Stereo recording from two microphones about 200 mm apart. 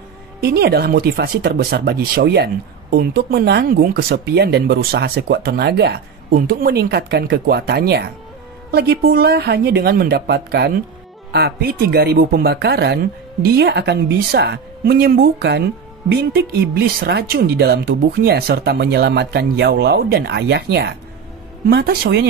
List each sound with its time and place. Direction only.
0.4 s speech: 50° right (ahead or behind)